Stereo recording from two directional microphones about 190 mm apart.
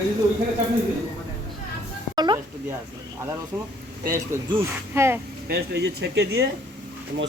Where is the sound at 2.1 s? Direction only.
20° right (ahead or behind).